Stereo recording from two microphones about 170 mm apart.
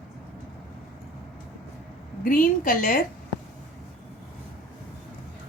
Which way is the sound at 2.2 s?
55° left (ahead or behind).